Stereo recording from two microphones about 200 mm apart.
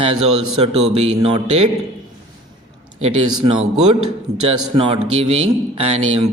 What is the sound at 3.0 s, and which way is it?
A man's voice, 30° right (ahead or behind).